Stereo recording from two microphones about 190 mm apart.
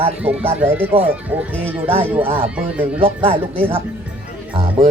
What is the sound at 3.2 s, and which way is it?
Speech, 30° right (ahead or behind).